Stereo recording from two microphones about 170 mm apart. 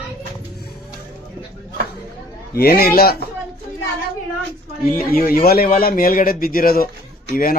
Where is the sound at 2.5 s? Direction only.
65° left (ahead or behind).